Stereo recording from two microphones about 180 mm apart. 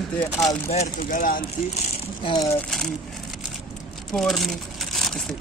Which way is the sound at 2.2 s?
20° left (ahead or behind).